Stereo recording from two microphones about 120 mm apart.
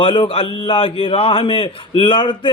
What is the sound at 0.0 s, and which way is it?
A man's voice, 45° left (ahead or behind).